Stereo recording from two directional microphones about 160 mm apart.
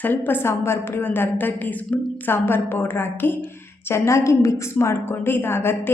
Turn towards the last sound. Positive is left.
turn(degrees=15)  # may be behind; listen again after turning